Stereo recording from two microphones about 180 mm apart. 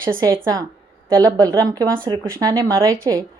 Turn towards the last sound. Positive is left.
turn(degrees=-15)  # may be behind; listen again after turning